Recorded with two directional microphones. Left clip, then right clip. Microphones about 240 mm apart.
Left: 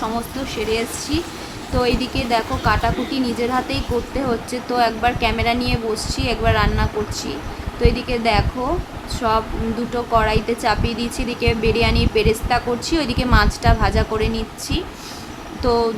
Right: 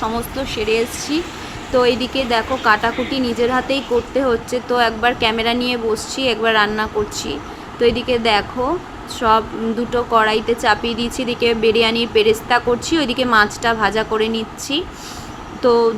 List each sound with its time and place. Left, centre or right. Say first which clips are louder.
0.5 s speech: right 4 dB; centre